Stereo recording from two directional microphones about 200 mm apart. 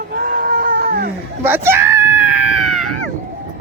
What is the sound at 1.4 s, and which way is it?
Screaming, 10° right (ahead or behind).